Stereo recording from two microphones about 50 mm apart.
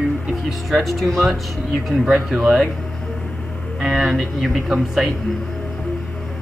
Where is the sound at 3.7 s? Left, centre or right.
Centre.